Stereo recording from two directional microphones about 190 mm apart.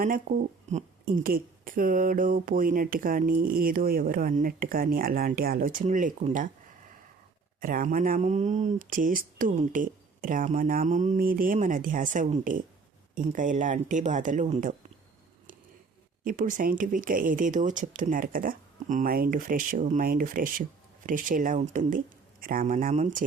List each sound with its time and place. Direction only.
0.3 s speech: 45° right (ahead or behind)
7.6 s speech: 45° right (ahead or behind)
16.2 s speech: 45° right (ahead or behind)